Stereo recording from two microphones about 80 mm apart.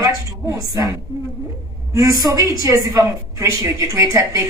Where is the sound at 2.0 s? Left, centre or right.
Right.